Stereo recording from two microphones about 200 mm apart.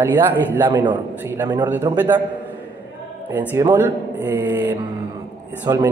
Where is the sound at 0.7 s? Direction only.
20° right (ahead or behind).